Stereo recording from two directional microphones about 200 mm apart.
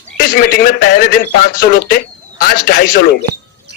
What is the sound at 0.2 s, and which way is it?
Speech, 45° left (ahead or behind).